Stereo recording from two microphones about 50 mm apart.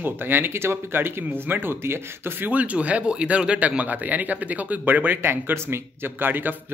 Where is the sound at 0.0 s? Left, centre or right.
Right.